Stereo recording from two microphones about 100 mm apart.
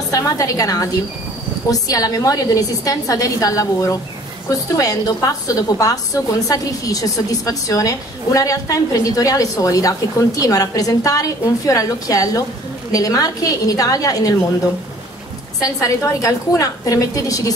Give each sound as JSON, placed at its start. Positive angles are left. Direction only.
{"t": 0.1, "sound": "a woman's voice", "side_deg": 35}
{"t": 15.6, "sound": "a woman's voice", "side_deg": 35}